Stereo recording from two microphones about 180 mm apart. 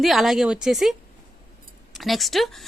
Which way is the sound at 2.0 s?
Centre (ahead or behind).